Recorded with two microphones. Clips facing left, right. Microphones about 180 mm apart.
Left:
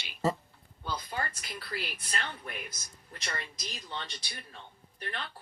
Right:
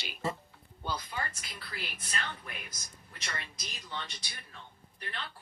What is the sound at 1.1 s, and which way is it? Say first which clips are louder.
Speech: left 5 dB; 40° left (ahead or behind).